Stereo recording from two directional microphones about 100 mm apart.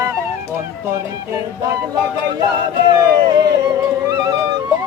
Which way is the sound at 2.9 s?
40° right (ahead or behind).